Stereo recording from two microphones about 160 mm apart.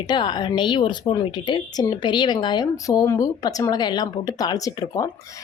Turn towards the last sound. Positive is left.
turn(degrees=20)  # may be behind; listen again after turning